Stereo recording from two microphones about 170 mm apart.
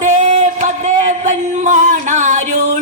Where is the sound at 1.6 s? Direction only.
45° right (ahead or behind).